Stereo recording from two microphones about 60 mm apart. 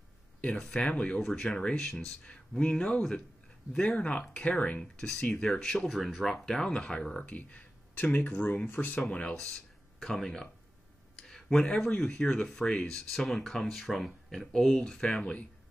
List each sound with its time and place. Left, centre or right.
0.6 s speech: centre
1.2 s speech: centre; by 9.0 s left
9.3 s speech: centre